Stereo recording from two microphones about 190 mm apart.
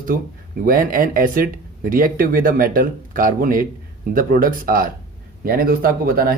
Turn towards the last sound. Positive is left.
turn(degrees=-50)  # may be behind; listen again after turning